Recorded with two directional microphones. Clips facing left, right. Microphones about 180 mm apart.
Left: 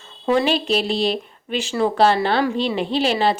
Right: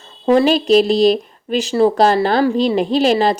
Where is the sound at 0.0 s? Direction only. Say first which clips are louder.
Right 6 dB; 40° right (ahead or behind).